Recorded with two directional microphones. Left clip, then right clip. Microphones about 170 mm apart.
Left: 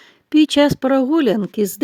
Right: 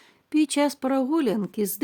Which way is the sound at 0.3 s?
25° left (ahead or behind).